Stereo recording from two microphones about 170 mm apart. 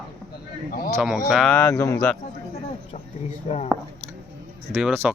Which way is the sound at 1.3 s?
Centre (ahead or behind).